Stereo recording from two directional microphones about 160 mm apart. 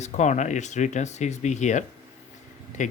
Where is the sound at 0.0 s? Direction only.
45° left (ahead or behind).